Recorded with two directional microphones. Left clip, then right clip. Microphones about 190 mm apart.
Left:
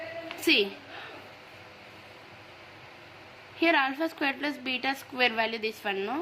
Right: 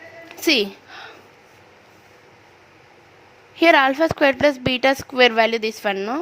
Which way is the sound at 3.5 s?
55° right (ahead or behind).